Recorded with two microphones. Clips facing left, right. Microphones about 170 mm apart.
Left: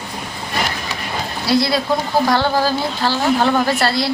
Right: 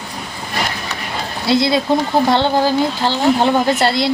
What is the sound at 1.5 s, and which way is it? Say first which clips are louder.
Speech: right 2 dB; 20° right (ahead or behind).